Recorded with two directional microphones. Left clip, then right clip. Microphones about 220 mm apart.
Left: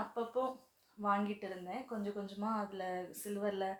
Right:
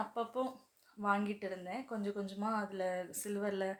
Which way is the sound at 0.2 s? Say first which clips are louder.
Left 4 dB; 45° right (ahead or behind).